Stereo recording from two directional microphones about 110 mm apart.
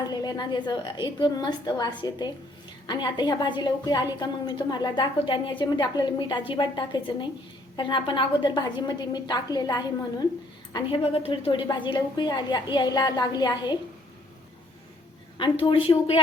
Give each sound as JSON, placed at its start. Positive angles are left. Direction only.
{"t": 0.1, "sound": "a woman's voice", "side_deg": 40}
{"t": 11.0, "sound": "a woman's voice", "side_deg": 60}
{"t": 15.4, "sound": "a woman's voice", "side_deg": 50}